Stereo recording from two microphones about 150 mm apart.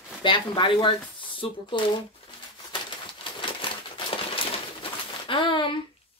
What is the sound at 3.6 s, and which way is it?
Crumpling, 35° left (ahead or behind).